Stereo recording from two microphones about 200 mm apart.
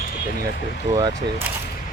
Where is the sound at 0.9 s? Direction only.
15° right (ahead or behind).